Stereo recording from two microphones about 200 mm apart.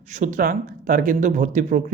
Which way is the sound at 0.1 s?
40° right (ahead or behind).